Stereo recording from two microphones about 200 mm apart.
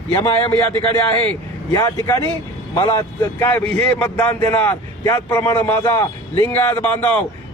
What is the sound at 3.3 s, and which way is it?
A man's voice, 10° left (ahead or behind).